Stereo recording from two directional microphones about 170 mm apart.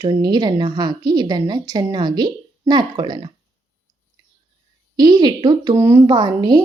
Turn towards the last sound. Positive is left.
turn(degrees=-25)  # may be behind; listen again after turning